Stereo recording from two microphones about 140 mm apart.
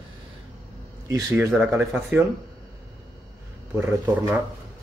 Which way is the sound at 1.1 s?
25° right (ahead or behind).